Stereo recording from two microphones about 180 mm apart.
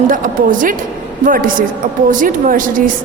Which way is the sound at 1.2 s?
50° right (ahead or behind).